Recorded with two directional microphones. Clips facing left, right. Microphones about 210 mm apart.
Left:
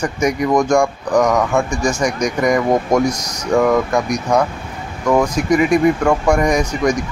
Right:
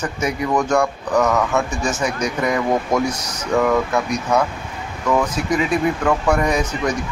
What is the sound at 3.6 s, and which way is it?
Speech, 10° left (ahead or behind).